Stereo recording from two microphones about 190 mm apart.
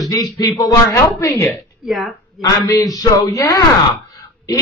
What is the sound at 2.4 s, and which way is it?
Speech, 20° left (ahead or behind).